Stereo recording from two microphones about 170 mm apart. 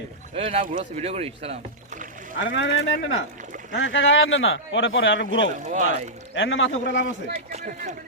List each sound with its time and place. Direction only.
0.3 s a man's voice: 45° right (ahead or behind)
2.4 s speech: 90° left
5.5 s speech: 45° right (ahead or behind)
6.3 s speech: 90° left
7.5 s speech: 45° right (ahead or behind)